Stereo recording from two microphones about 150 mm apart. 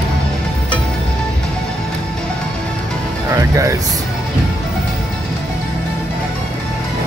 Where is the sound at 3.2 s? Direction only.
20° right (ahead or behind).